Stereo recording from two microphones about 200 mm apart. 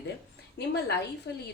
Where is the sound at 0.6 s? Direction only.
55° left (ahead or behind).